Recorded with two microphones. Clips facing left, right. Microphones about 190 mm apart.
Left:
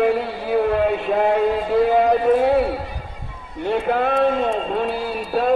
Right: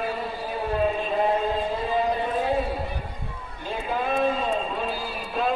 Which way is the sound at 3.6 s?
65° left (ahead or behind).